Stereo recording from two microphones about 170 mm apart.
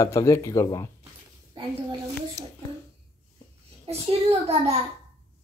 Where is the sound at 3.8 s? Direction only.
35° right (ahead or behind).